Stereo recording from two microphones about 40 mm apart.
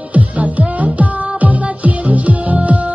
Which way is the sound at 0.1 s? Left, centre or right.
Right.